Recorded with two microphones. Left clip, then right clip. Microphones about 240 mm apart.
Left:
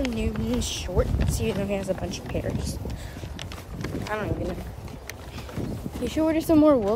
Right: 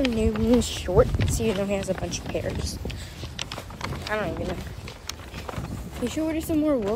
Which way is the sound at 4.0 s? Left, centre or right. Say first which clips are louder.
Right 2 dB; centre.